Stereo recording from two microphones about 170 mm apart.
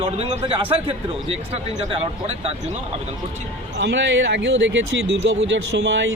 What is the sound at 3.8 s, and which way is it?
A man's voice, 90° right.